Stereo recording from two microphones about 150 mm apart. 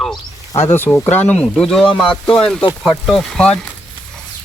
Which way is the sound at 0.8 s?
15° left (ahead or behind).